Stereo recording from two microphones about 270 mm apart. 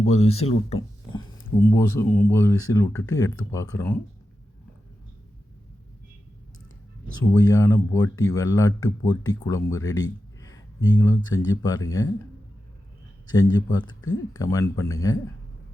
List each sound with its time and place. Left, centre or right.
0.0 s speech: left
1.7 s speech: centre
7.3 s speech: centre
13.2 s speech: centre